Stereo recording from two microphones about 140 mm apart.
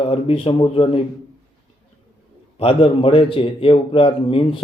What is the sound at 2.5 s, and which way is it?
Speech, 45° left (ahead or behind).